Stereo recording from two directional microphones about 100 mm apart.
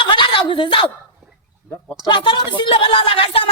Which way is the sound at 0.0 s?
55° left (ahead or behind).